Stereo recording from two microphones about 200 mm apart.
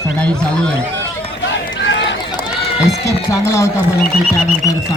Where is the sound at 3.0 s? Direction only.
15° left (ahead or behind).